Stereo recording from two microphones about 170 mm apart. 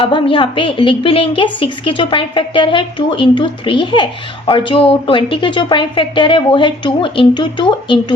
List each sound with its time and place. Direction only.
0.0 s a woman's voice: 30° left (ahead or behind)